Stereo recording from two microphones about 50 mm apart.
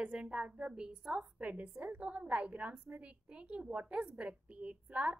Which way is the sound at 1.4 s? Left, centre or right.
Right.